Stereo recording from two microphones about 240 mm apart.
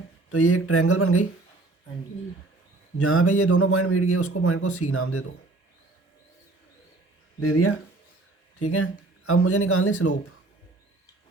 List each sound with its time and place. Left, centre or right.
0.3 s a man's voice: left
3.0 s a man's voice: left
7.3 s speech: left